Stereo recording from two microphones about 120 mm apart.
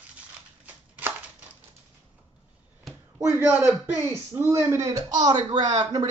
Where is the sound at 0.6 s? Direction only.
10° right (ahead or behind).